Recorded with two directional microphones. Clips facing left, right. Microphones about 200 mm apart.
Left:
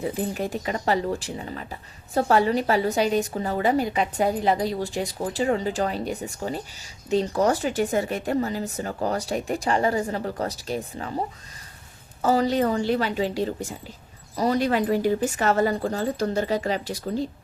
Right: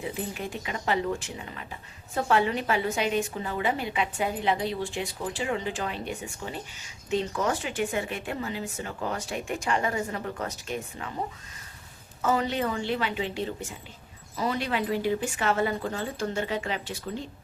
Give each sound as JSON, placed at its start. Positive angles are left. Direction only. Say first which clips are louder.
{"t": 0.0, "sound": "speech", "louder": "left 6 dB", "side_deg": 40}
{"t": 12.2, "sound": "speech", "louder": "left 5 dB", "side_deg": 35}